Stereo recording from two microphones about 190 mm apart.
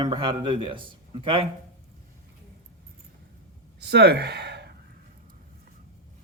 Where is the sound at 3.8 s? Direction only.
60° right (ahead or behind).